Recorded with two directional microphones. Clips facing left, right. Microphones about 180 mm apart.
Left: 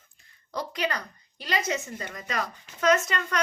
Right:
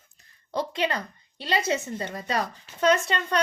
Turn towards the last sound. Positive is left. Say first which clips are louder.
# right 1 dB
turn(degrees=-30)  # may be behind; listen again after turning